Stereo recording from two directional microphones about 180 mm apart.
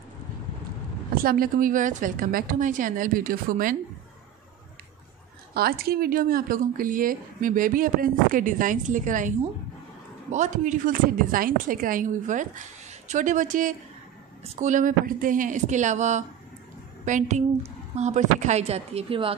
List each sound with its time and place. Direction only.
1.1 s a woman's voice: 55° right (ahead or behind)
5.5 s a woman's voice: 55° right (ahead or behind)
10.3 s a woman's voice: 45° right (ahead or behind)